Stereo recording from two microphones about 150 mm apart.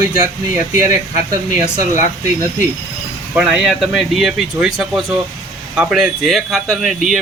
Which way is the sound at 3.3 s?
5° right (ahead or behind).